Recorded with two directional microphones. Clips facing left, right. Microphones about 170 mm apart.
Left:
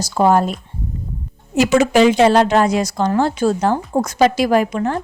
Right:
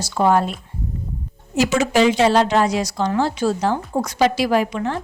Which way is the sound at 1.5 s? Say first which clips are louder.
Left 4 dB; 55° left (ahead or behind).